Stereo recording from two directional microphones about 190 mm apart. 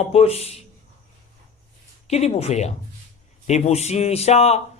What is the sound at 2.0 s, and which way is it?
Speech, 35° left (ahead or behind).